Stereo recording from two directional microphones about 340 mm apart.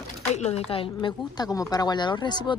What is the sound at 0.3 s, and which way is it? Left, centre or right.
Speech, centre.